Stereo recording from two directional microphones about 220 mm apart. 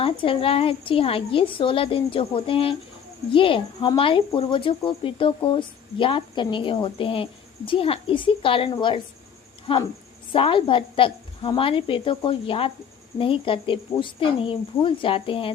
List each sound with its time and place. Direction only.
0.0 s speech: 25° left (ahead or behind)